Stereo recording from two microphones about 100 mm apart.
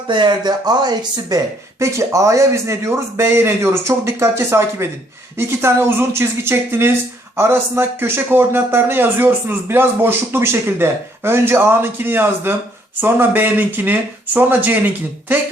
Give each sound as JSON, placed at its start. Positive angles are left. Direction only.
{"t": 0.1, "sound": "speech", "side_deg": -50}
{"t": 1.8, "sound": "a man's voice", "side_deg": -30}